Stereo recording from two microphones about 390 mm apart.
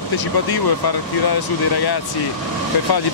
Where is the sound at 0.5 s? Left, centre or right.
Left.